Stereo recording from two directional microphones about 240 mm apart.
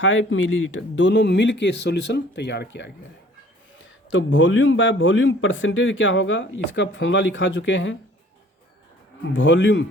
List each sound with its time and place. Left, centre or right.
0.0 s speech: left
4.1 s speech: left
9.3 s speech: left